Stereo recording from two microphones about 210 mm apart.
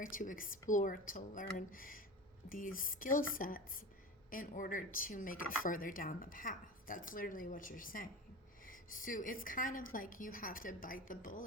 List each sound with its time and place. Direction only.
0.0 s a woman's voice: 40° left (ahead or behind)